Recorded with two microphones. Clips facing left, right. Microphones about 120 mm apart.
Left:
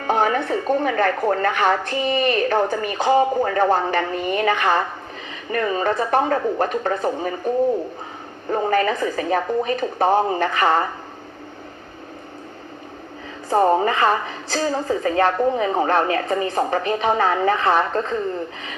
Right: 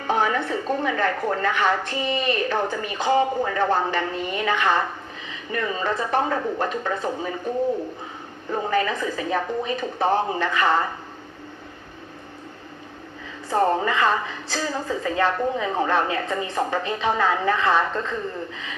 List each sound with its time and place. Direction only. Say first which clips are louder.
0.1 s a woman's voice: left 3 dB; 50° left (ahead or behind)
8.4 s a woman's voice: left 4 dB; 45° left (ahead or behind)
13.5 s speech: left 4 dB; 55° left (ahead or behind)